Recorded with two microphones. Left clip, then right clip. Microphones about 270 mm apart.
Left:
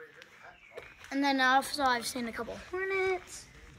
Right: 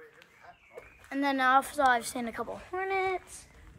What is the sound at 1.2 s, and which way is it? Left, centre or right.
Speech, centre.